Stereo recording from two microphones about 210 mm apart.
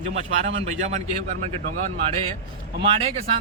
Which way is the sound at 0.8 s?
35° right (ahead or behind).